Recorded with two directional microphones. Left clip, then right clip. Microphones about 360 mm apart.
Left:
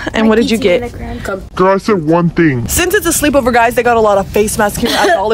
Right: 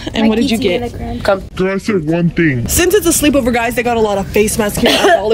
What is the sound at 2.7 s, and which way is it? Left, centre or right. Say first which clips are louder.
Speech: right 4 dB; centre.